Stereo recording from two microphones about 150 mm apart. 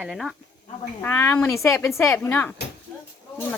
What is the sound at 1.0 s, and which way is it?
A woman's voice, 15° left (ahead or behind).